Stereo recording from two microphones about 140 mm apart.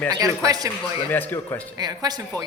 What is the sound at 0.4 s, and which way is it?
Speech, 25° right (ahead or behind).